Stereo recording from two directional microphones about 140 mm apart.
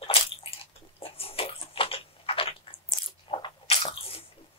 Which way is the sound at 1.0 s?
40° left (ahead or behind).